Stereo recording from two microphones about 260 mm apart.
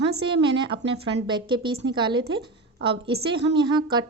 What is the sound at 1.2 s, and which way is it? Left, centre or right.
A woman's voice, centre.